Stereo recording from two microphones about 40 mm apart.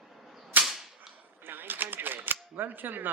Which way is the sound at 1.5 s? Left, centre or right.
Right.